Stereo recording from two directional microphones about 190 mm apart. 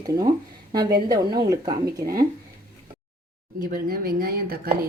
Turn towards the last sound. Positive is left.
turn(degrees=-50)  # may be behind; listen again after turning